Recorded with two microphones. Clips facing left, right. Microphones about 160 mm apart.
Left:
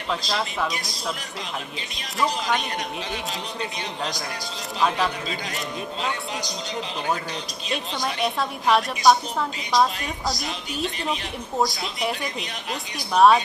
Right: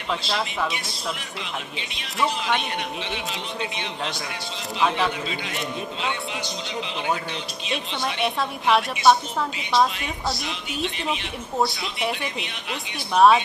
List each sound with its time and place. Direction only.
0.3 s a woman's voice: centre (ahead or behind)
4.8 s a woman's voice: centre (ahead or behind)
7.7 s a woman's voice: centre (ahead or behind)
10.3 s a woman's voice: 40° left (ahead or behind)
12.0 s a woman's voice: 5° right (ahead or behind)